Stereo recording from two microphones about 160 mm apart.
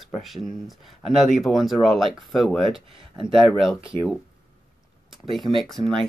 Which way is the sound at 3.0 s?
35° right (ahead or behind).